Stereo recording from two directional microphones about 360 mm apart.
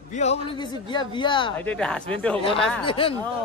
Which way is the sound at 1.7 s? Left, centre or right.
Centre.